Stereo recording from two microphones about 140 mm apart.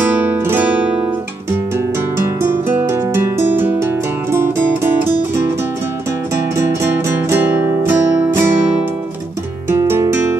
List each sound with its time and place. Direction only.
0.0 s music: 15° right (ahead or behind)
2.7 s music: 15° right (ahead or behind)
6.8 s music: 15° right (ahead or behind)
9.7 s music: 20° right (ahead or behind)